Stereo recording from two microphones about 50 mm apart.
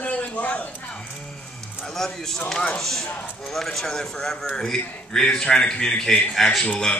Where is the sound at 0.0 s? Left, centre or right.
Left.